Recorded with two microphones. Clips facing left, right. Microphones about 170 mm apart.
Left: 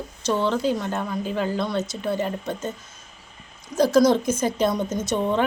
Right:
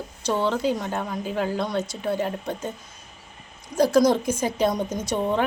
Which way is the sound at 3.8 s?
10° right (ahead or behind).